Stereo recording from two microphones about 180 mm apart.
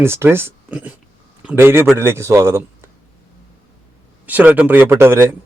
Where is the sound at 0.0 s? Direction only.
15° right (ahead or behind).